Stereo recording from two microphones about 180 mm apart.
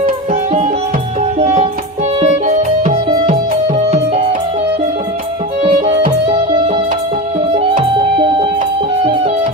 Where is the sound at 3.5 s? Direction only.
40° right (ahead or behind).